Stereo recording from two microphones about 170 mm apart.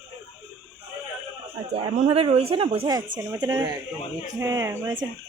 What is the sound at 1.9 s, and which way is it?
Speech, 35° right (ahead or behind).